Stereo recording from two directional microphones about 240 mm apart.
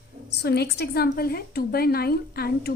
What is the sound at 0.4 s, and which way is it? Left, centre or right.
A woman's voice, left.